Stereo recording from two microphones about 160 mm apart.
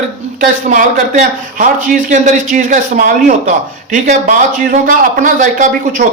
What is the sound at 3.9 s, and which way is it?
Speech, 55° right (ahead or behind).